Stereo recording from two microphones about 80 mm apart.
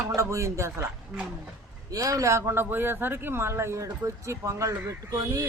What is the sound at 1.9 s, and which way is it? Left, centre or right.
Speech, right.